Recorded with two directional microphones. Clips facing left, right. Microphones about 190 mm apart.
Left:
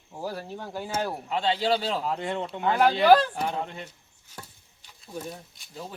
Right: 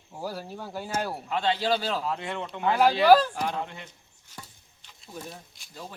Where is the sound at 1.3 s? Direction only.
25° left (ahead or behind).